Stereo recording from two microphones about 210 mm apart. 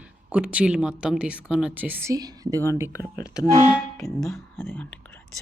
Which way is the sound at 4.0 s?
Centre (ahead or behind).